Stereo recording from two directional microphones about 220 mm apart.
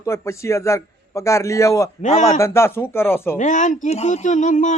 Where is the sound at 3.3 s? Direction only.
35° left (ahead or behind).